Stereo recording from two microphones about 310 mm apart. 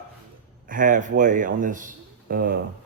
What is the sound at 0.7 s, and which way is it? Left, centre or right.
A man's voice, right.